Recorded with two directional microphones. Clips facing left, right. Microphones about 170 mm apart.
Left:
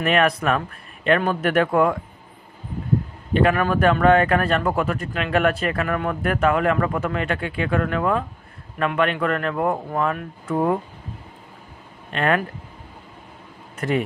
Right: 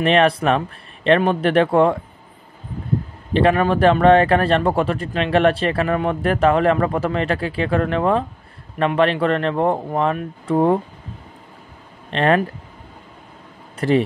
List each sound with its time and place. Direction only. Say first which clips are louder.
0.0 s speech: right 4 dB; 30° right (ahead or behind)
3.3 s speech: right 3 dB; 30° right (ahead or behind)
12.1 s speech: right 4 dB; 30° right (ahead or behind)
13.7 s speech: right 6 dB; 30° right (ahead or behind)